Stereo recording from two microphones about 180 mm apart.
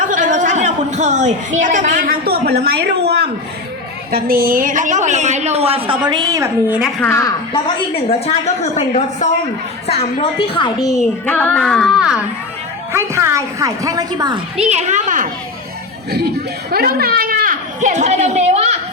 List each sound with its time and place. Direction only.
0.1 s a sound: 45° right (ahead or behind); by 3.2 s 65° right (ahead or behind)
4.1 s a woman's voice: 55° right (ahead or behind); by 5.8 s 35° right (ahead or behind)
6.1 s a woman's voice: 20° right (ahead or behind)
7.0 s a woman's voice: 15° left (ahead or behind)
8.3 s a woman's voice: 35° left (ahead or behind); by 11.0 s 20° left (ahead or behind)
11.3 s speech: 10° left (ahead or behind)
12.9 s a woman's voice: 15° right (ahead or behind)
14.5 s a woman's voice: 35° right (ahead or behind)
16.7 s a child's voice: 60° right (ahead or behind); by 18.8 s 35° right (ahead or behind)